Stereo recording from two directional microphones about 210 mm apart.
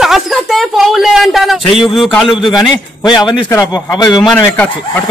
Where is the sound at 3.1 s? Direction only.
20° left (ahead or behind).